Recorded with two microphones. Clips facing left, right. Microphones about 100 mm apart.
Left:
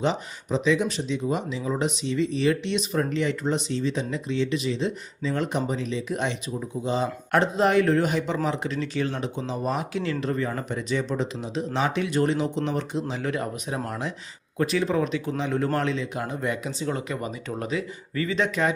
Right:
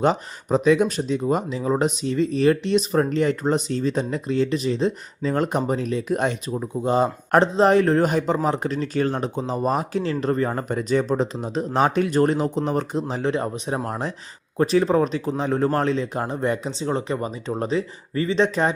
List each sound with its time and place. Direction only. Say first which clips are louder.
0.0 s speech: right 5 dB; 50° right (ahead or behind)
13.2 s speech: right 5 dB; 30° right (ahead or behind)